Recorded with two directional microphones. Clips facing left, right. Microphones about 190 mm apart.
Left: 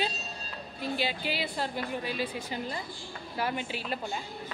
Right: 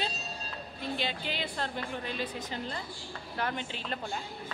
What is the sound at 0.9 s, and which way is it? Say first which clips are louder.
A woman's voice: left 3 dB; 5° left (ahead or behind).